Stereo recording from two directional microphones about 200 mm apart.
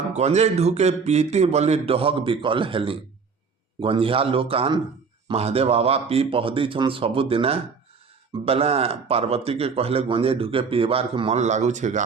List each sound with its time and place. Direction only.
0.1 s a man's voice: 35° right (ahead or behind)